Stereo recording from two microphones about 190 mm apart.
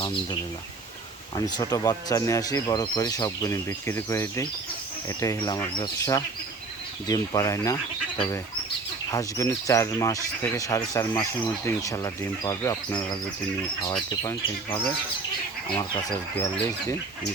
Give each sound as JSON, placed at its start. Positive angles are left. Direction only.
{"t": 1.4, "sound": "speech", "side_deg": 20}
{"t": 9.1, "sound": "speech", "side_deg": 15}
{"t": 14.1, "sound": "speech", "side_deg": 20}